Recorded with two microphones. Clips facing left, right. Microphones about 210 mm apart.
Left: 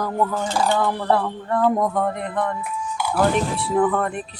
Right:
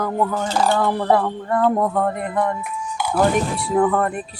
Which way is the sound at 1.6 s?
Centre (ahead or behind).